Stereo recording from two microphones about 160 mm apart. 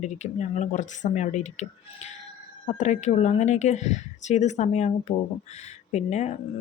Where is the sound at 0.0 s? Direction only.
45° left (ahead or behind).